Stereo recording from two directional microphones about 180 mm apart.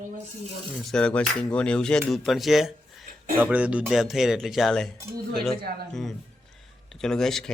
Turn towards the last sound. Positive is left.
turn(degrees=0)  # may be behind; listen again after turning